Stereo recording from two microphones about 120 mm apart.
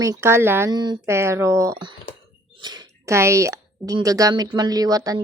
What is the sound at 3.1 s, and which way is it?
A woman's voice, 25° right (ahead or behind).